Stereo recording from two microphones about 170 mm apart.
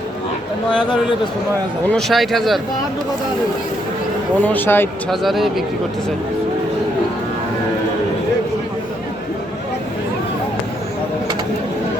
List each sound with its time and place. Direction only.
0.7 s speech: 30° left (ahead or behind)
1.9 s a man's voice: centre (ahead or behind)
4.4 s speech: 10° left (ahead or behind)
5.1 s a man's voice: centre (ahead or behind)